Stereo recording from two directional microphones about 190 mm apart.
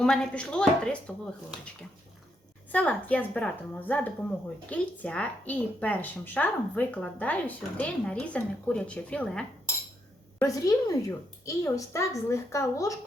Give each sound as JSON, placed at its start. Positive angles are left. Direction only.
{"t": 0.0, "sound": "speech", "side_deg": 5}
{"t": 2.7, "sound": "a woman's voice", "side_deg": 10}
{"t": 10.4, "sound": "a woman's voice", "side_deg": 20}